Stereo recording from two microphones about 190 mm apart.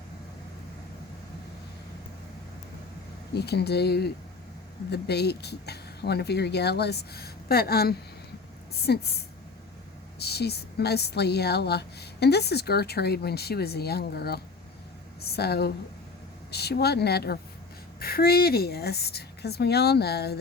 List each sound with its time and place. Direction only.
3.3 s a woman's voice: 60° left (ahead or behind)